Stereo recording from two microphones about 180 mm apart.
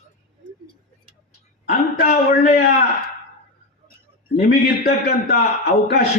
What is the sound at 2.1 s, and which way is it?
Speech, 55° left (ahead or behind).